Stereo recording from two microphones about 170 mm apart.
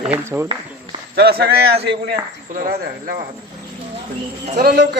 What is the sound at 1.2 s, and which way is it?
Speech, 70° right (ahead or behind).